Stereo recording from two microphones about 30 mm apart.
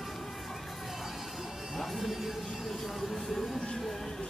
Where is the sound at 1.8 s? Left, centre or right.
Centre.